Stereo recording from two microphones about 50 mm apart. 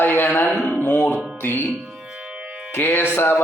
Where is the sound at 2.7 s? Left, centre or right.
Left.